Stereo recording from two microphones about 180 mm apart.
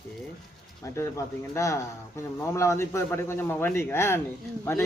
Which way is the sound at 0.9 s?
15° left (ahead or behind).